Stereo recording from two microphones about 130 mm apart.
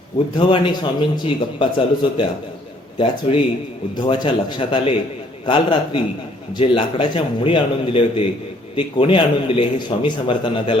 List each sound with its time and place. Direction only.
0.3 s a man's voice: 40° left (ahead or behind)
6.5 s a man's voice: 40° left (ahead or behind)